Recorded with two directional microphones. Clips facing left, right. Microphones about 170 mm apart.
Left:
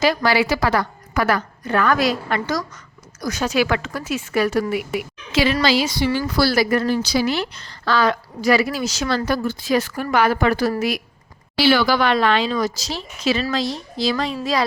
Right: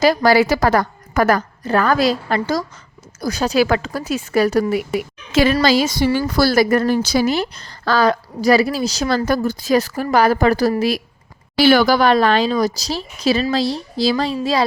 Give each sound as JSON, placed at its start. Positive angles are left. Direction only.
{"t": 0.0, "sound": "a woman's voice", "side_deg": -40}
{"t": 11.5, "sound": "a woman's voice", "side_deg": -45}